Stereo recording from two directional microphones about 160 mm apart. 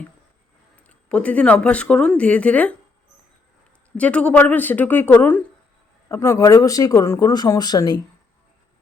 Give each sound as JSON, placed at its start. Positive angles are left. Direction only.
{"t": 0.8, "sound": "speech", "side_deg": 5}
{"t": 3.9, "sound": "speech", "side_deg": 10}